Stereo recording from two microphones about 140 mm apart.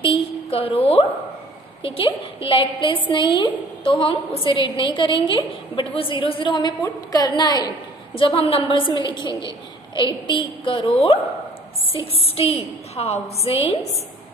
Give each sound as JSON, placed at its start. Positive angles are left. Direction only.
{"t": 0.0, "sound": "a woman's voice", "side_deg": 40}
{"t": 1.8, "sound": "a woman's voice", "side_deg": 40}
{"t": 8.1, "sound": "a woman's voice", "side_deg": 40}